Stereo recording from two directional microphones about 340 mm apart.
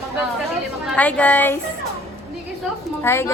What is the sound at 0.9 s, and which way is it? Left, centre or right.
Speech, centre.